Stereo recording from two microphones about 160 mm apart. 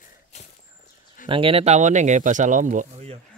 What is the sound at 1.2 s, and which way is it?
Speech, 35° right (ahead or behind).